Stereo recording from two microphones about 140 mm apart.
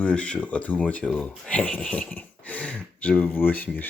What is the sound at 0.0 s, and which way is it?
Speech, 10° left (ahead or behind).